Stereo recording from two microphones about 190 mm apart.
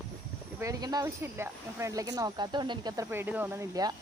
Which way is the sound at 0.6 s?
20° right (ahead or behind).